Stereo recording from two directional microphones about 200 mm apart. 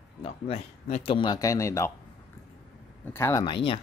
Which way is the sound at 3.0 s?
10° left (ahead or behind).